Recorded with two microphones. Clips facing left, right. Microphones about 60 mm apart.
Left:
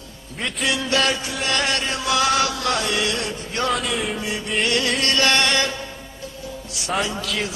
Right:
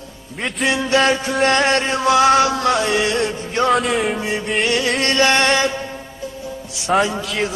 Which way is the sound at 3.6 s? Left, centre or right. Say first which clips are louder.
Right 7 dB; centre.